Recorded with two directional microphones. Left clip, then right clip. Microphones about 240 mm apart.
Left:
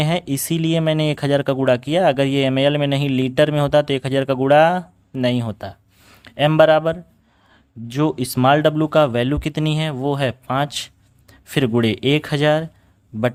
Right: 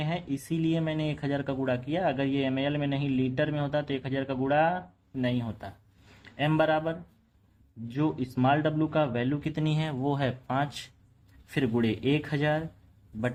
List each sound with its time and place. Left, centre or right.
0.0 s speech: left